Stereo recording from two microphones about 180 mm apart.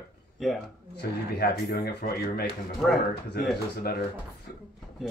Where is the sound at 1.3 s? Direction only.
60° left (ahead or behind).